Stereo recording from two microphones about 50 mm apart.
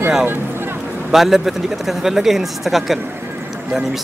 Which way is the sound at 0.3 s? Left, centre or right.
Right.